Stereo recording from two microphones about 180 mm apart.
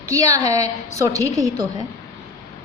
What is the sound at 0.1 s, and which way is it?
A woman's voice, 15° right (ahead or behind).